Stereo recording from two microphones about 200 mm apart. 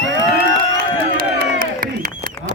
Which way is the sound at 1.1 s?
45° right (ahead or behind).